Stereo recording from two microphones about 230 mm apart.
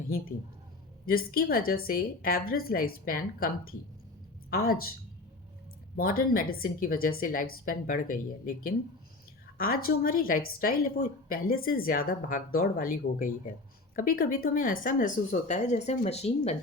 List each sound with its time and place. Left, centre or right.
1.0 s a woman's voice: left
6.0 s a woman's voice: left